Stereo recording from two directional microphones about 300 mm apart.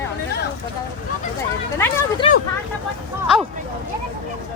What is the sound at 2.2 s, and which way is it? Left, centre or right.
Vehicle, centre.